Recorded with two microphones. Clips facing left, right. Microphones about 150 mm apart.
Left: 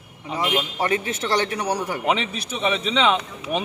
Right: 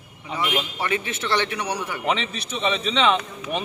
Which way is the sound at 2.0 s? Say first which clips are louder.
Right 1 dB; 10° left (ahead or behind).